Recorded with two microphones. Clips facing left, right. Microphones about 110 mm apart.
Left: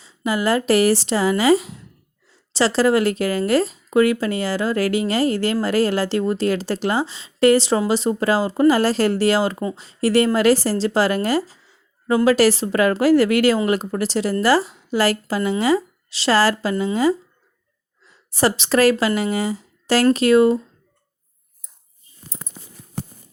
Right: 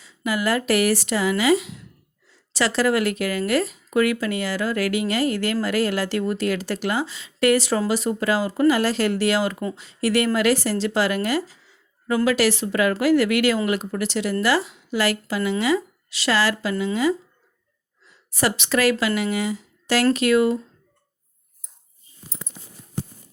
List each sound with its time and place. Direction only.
0.0 s a woman's voice: 30° left (ahead or behind)
18.3 s a woman's voice: 35° left (ahead or behind)